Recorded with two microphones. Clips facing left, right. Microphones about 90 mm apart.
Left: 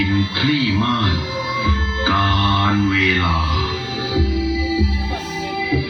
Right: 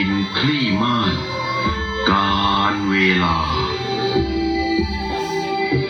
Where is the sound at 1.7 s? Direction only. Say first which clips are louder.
Right 3 dB; 30° right (ahead or behind).